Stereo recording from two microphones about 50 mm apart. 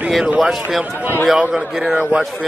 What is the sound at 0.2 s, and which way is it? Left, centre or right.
Speech, centre.